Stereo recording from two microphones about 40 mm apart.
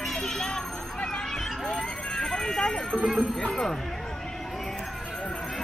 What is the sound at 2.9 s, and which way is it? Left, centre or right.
Speech, right.